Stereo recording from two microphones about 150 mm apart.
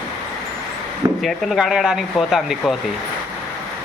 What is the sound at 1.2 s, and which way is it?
Speech, centre (ahead or behind).